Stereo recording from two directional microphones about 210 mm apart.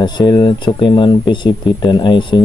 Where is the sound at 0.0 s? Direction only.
20° left (ahead or behind).